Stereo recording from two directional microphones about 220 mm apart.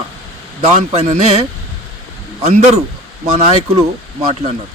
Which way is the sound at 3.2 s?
30° right (ahead or behind).